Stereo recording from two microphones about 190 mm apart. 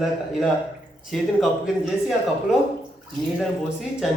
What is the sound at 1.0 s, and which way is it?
A man's voice, centre (ahead or behind).